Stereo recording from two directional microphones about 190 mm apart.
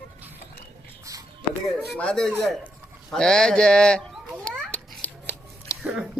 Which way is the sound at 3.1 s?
5° left (ahead or behind).